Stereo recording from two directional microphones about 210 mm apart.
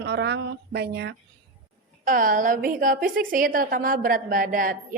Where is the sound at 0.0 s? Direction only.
55° right (ahead or behind).